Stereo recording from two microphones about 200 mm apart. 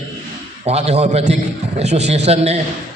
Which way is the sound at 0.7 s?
30° right (ahead or behind).